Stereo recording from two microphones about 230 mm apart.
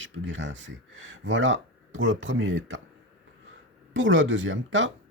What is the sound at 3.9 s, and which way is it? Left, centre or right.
Speech, right.